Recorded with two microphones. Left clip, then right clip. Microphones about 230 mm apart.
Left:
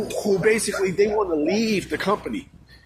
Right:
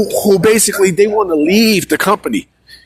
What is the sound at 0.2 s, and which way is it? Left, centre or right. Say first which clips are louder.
Speech: right 9 dB; right.